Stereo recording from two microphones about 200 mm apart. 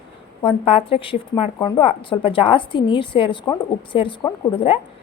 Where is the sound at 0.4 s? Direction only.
30° left (ahead or behind).